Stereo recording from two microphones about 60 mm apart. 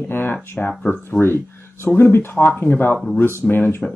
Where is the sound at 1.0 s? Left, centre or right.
Left.